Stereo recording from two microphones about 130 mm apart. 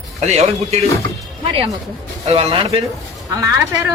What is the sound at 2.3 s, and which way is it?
Speech, 45° right (ahead or behind).